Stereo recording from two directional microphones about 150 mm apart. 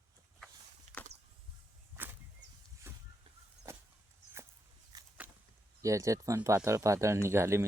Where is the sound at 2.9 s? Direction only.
15° right (ahead or behind).